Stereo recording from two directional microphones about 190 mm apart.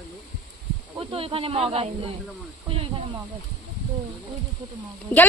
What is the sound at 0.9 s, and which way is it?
Speech, 30° right (ahead or behind).